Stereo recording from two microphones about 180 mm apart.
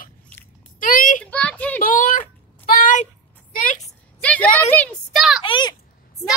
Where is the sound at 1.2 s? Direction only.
5° left (ahead or behind).